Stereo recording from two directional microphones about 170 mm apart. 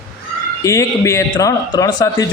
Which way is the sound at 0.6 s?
15° left (ahead or behind).